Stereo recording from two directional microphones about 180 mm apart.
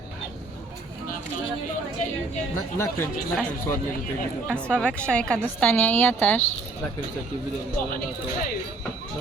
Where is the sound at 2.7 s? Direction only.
15° left (ahead or behind).